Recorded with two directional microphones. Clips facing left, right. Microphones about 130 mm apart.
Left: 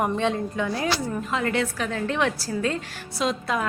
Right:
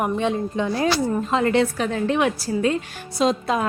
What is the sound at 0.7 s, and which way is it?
A woman's voice, 30° right (ahead or behind).